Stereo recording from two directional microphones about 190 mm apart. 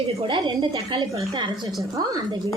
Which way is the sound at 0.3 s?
25° right (ahead or behind).